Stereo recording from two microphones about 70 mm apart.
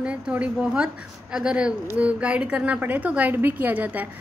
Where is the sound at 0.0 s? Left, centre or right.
Centre.